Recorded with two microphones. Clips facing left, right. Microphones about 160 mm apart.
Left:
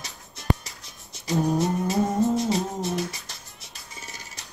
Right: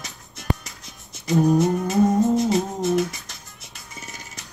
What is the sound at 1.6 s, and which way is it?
Humming, 50° right (ahead or behind).